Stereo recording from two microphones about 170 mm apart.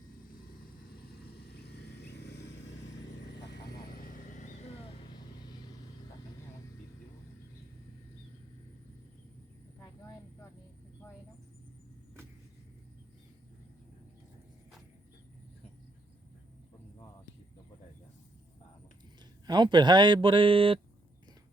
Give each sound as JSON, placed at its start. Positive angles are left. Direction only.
{"t": 1.8, "sound": "vehicle", "side_deg": 85}
{"t": 3.5, "sound": "vehicle", "side_deg": 60}
{"t": 19.5, "sound": "speech", "side_deg": -25}